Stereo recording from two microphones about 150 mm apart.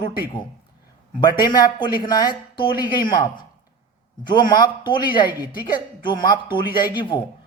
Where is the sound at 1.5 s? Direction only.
30° left (ahead or behind).